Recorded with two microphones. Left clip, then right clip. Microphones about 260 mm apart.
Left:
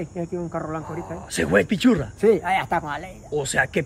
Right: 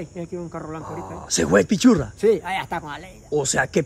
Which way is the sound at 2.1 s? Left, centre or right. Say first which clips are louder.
Left 1 dB; centre.